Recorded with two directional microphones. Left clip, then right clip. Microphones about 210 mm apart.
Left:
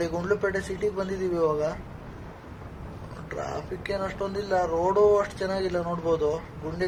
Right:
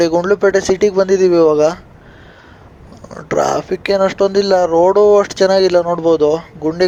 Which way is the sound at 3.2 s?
45° right (ahead or behind).